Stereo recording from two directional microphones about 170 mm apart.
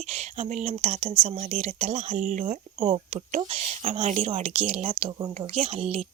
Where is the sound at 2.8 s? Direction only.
35° right (ahead or behind).